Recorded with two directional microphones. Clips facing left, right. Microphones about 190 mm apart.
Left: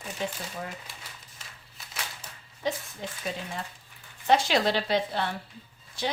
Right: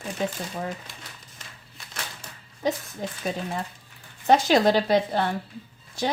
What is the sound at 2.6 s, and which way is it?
Speech, 40° right (ahead or behind).